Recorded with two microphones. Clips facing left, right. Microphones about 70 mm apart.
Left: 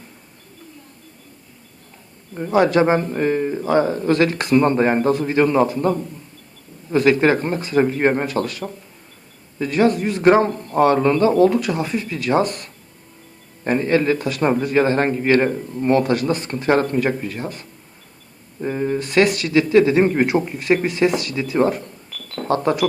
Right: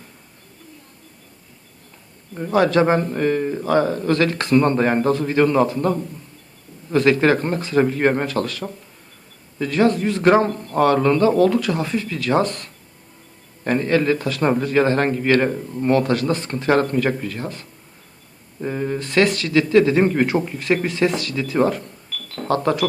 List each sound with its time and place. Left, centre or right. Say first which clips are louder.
2.3 s speech: left 1 dB; centre
11.3 s speech: left 1 dB; left
11.6 s speech: even; centre
13.7 s speech: left 1 dB; centre
15.4 s speech: left 1 dB; centre